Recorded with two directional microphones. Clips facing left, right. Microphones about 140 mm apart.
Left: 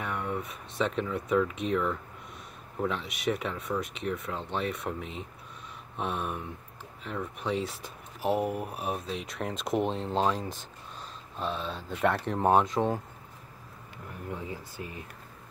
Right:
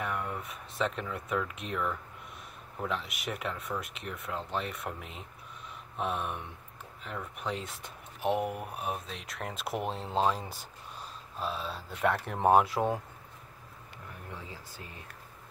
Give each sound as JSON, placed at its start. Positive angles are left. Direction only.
{"t": 0.0, "sound": "speech", "side_deg": 0}
{"t": 14.3, "sound": "speech", "side_deg": 15}